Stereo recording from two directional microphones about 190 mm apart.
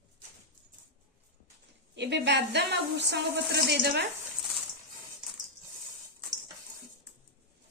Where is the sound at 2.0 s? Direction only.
65° right (ahead or behind).